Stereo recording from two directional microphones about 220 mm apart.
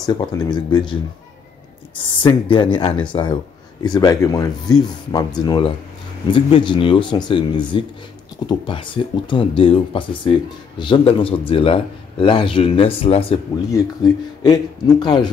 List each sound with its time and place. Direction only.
0.0 s speech: 20° left (ahead or behind)
2.0 s speech: 25° left (ahead or behind)